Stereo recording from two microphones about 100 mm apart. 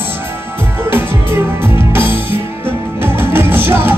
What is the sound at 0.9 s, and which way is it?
Music, 25° right (ahead or behind).